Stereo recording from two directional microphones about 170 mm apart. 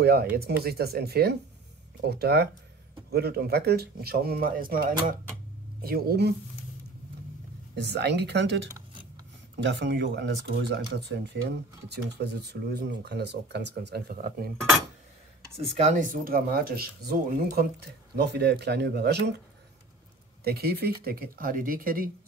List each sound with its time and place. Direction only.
0.0 s speech: 65° right (ahead or behind)
7.7 s speech: 80° right
15.8 s speech: 50° right (ahead or behind); by 19.3 s 75° right (ahead or behind)
20.4 s speech: 70° right (ahead or behind)